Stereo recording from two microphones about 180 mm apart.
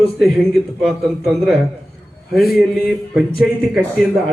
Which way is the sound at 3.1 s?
Centre (ahead or behind).